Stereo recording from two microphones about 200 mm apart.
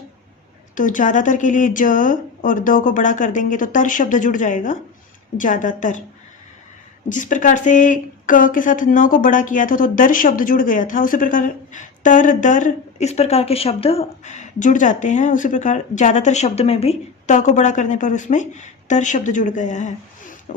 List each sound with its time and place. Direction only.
0.8 s speech: 40° left (ahead or behind)
7.1 s speech: 40° left (ahead or behind)